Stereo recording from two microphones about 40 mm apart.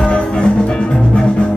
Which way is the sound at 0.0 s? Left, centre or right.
Left.